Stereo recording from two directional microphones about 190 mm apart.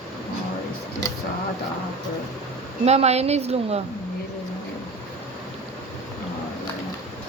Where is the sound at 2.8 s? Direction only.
35° right (ahead or behind).